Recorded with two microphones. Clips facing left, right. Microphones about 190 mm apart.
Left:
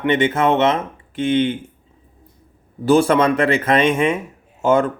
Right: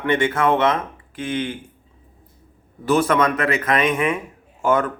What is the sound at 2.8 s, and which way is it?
Speech, 30° left (ahead or behind).